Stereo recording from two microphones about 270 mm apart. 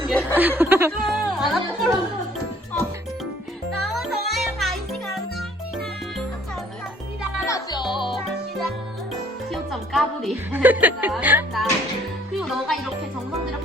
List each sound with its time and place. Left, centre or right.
0.1 s chuckle: centre
0.3 s speech: centre
3.8 s music: centre
7.4 s music: centre
9.5 s a woman's voice: centre
12.4 s music: centre